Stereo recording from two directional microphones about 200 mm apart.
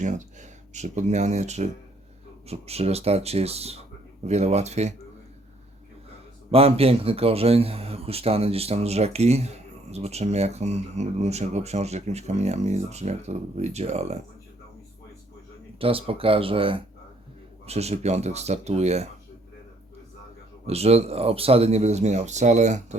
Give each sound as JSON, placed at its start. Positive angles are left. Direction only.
{"t": 0.7, "sound": "speech", "side_deg": -35}
{"t": 6.5, "sound": "speech", "side_deg": -30}
{"t": 15.8, "sound": "speech", "side_deg": -25}
{"t": 20.7, "sound": "speech", "side_deg": -30}